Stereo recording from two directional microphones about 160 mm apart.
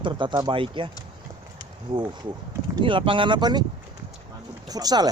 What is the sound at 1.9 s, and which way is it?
Speech, 30° right (ahead or behind).